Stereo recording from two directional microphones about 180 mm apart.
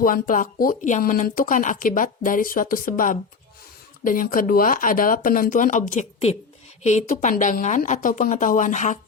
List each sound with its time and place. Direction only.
0.0 s speech: 50° left (ahead or behind)